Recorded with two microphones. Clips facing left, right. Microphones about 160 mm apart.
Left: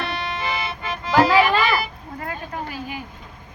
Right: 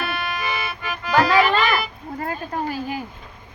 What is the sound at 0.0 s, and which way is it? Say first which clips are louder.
Accordion: even; 25° left (ahead or behind).